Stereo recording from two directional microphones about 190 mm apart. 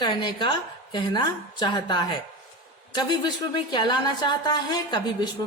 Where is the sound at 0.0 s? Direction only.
25° left (ahead or behind).